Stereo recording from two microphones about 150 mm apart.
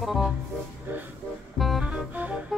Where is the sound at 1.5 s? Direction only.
Centre (ahead or behind).